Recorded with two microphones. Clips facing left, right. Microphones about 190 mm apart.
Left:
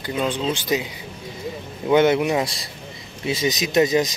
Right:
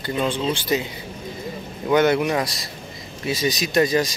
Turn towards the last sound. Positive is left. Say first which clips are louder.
# left 1 dB
turn(degrees=20)  # may be behind; listen again after turning